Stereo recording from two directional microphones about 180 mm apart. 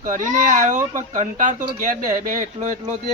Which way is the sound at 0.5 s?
45° right (ahead or behind).